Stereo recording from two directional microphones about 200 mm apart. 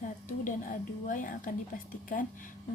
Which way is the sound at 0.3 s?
40° left (ahead or behind).